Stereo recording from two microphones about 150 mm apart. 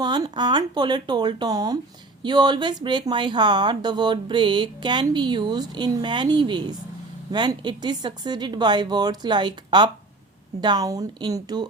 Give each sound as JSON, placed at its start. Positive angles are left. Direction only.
{"t": 0.0, "sound": "speech", "side_deg": -25}